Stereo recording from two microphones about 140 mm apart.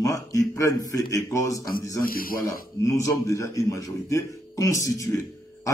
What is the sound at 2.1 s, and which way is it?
Speech, 90° left.